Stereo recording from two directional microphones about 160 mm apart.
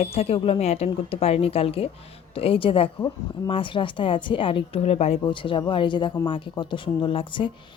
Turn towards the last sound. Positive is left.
turn(degrees=30)  # may be behind; listen again after turning